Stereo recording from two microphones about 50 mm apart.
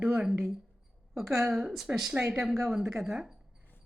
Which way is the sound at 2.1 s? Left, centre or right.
Centre.